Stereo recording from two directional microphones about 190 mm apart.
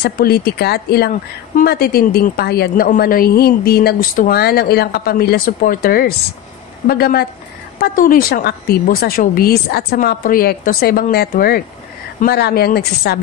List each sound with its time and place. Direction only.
0.0 s a woman's voice: 55° left (ahead or behind)